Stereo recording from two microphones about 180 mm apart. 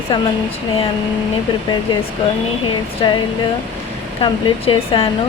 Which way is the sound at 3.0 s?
25° left (ahead or behind).